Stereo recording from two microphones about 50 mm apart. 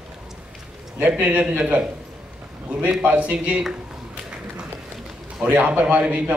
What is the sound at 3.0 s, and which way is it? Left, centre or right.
Speech, right.